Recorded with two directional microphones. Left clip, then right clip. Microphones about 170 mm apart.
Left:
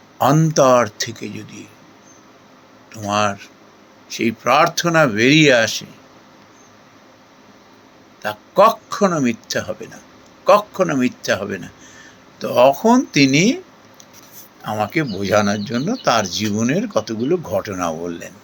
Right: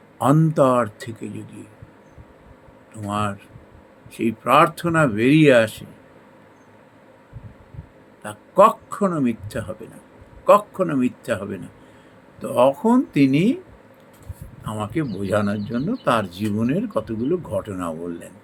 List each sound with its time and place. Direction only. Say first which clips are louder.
0.5 s speech: left 5 dB; 20° right (ahead or behind)
2.9 s speech: left 7 dB; 15° right (ahead or behind)
8.2 s a sound: left 2 dB; 15° right (ahead or behind)
8.9 s speech: left 5 dB; 15° right (ahead or behind)
10.8 s speech: left 4 dB; 15° right (ahead or behind)
14.6 s speech: left 6 dB; 10° right (ahead or behind)